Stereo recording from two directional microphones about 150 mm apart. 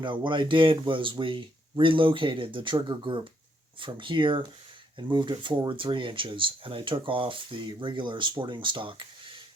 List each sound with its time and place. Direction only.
0.0 s speech: 30° right (ahead or behind)